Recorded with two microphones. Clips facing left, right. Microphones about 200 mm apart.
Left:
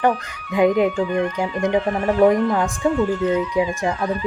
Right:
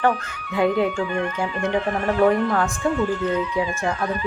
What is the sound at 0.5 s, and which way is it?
Speech, 15° left (ahead or behind).